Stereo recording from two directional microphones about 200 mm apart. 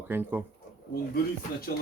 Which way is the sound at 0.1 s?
10° right (ahead or behind).